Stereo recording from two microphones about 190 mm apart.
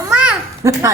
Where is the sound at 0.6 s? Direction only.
15° right (ahead or behind).